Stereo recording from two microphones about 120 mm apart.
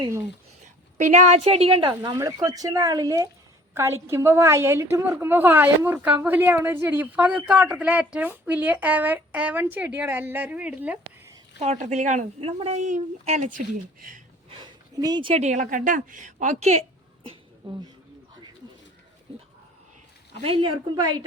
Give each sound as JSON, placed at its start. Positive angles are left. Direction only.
{"t": 0.6, "sound": "a woman's voice", "side_deg": -90}
{"t": 2.1, "sound": "a woman's voice", "side_deg": -30}
{"t": 11.6, "sound": "a woman's voice", "side_deg": -70}
{"t": 12.4, "sound": "a woman's voice", "side_deg": -50}
{"t": 12.8, "sound": "a woman's voice", "side_deg": -80}
{"t": 14.5, "sound": "a sound", "side_deg": -35}
{"t": 15.3, "sound": "a woman's voice", "side_deg": -75}
{"t": 17.6, "sound": "a woman's voice", "side_deg": -45}
{"t": 20.4, "sound": "a woman's voice", "side_deg": -50}